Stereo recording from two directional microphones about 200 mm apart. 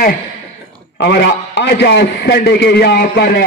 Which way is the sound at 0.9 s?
60° left (ahead or behind).